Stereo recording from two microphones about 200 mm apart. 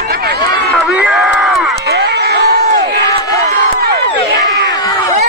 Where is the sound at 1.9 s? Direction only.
55° right (ahead or behind).